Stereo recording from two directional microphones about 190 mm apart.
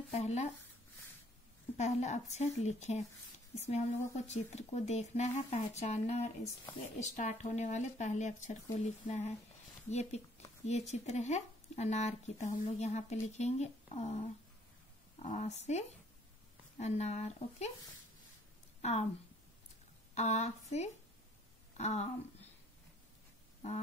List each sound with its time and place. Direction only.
0.1 s speech: 35° left (ahead or behind)
1.8 s speech: 35° left (ahead or behind)
18.8 s a woman's voice: 35° left (ahead or behind)
20.2 s speech: 35° left (ahead or behind)